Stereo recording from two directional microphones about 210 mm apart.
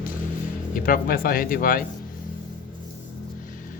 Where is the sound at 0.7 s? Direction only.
40° left (ahead or behind).